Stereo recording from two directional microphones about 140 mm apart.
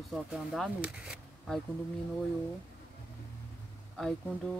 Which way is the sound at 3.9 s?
5° left (ahead or behind).